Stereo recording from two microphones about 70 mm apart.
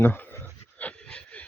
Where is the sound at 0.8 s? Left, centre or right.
Centre.